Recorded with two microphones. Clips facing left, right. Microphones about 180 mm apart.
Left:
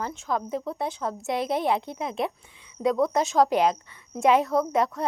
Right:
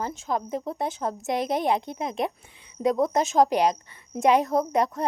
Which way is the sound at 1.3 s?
45° right (ahead or behind).